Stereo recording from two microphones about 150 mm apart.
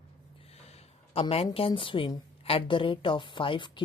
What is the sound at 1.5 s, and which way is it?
A woman's voice, 35° left (ahead or behind).